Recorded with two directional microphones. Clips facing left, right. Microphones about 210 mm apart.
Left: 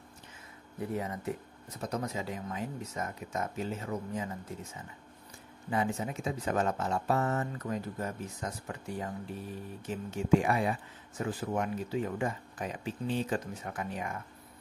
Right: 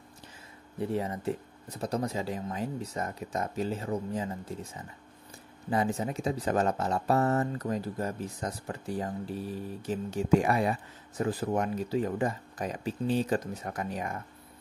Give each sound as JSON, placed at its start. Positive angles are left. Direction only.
{"t": 0.7, "sound": "speech", "side_deg": -30}
{"t": 5.7, "sound": "speech", "side_deg": -35}